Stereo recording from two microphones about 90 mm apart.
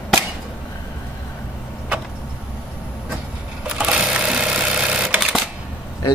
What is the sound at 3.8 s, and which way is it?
Sewing machine, 15° right (ahead or behind).